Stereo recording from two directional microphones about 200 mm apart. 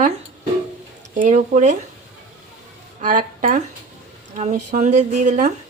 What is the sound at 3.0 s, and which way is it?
Speech, 40° right (ahead or behind).